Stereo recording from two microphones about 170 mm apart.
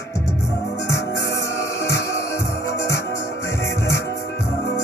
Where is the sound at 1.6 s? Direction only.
15° left (ahead or behind).